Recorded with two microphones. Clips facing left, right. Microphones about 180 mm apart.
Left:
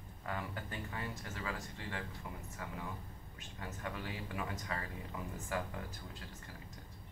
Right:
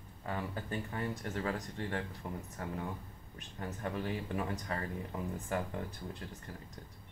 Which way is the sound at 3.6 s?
35° right (ahead or behind).